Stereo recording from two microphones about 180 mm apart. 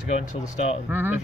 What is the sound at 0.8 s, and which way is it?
Speech, 10° right (ahead or behind).